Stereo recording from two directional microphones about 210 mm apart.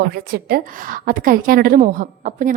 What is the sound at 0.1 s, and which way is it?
A woman's voice, 45° right (ahead or behind).